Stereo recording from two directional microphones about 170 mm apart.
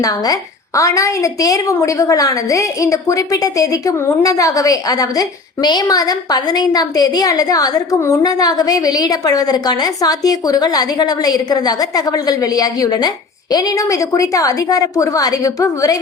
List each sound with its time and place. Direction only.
0.0 s a woman's voice: 20° left (ahead or behind)